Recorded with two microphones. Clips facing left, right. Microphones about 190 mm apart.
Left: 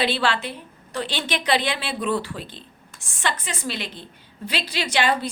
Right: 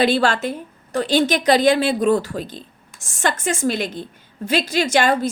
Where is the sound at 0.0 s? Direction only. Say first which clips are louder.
Right 6 dB; 45° right (ahead or behind).